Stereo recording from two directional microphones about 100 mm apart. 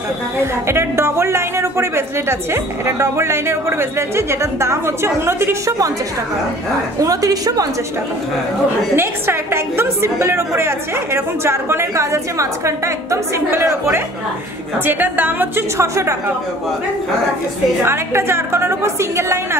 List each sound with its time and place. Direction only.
0.4 s speech: 25° right (ahead or behind)
7.0 s a woman's voice: 35° right (ahead or behind)
8.9 s speech: 25° right (ahead or behind)
15.8 s a woman's voice: 30° right (ahead or behind)
17.8 s speech: 25° right (ahead or behind)